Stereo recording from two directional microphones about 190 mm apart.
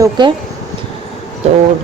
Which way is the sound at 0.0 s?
25° right (ahead or behind).